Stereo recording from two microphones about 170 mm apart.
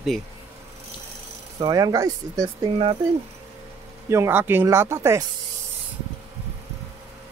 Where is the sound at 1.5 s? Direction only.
25° right (ahead or behind).